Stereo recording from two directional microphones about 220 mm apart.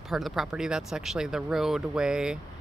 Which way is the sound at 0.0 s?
Centre (ahead or behind).